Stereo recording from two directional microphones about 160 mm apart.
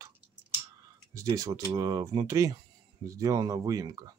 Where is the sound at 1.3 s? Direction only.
20° right (ahead or behind).